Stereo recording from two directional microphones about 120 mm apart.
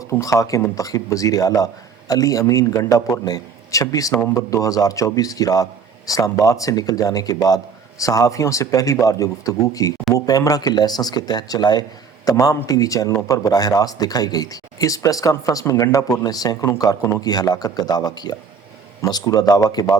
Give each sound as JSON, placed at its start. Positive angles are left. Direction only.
{"t": 0.1, "sound": "speech", "side_deg": 25}